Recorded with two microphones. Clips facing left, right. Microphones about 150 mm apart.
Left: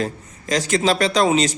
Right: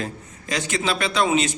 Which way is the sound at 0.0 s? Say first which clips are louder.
Left 5 dB; 40° left (ahead or behind).